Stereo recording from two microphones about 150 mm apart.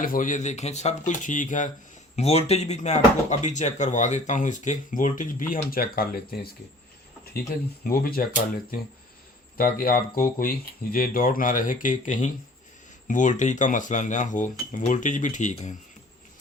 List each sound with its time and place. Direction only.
0.0 s speech: 65° left (ahead or behind)
2.1 s speech: 45° left (ahead or behind); by 6.5 s 85° left
7.9 s speech: 80° left
9.6 s speech: 75° left (ahead or behind); by 15.7 s 55° left (ahead or behind)